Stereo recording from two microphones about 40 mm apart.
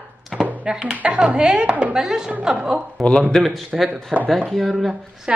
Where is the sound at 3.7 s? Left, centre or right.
Centre.